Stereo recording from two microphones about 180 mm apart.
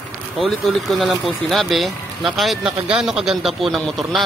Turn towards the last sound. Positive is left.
turn(degrees=0)  # may be behind; listen again after turning